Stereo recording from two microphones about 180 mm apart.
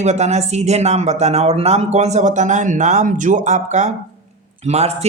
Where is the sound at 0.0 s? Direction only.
40° right (ahead or behind).